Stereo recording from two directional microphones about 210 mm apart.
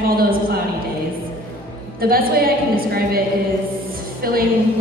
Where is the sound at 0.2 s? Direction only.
45° right (ahead or behind).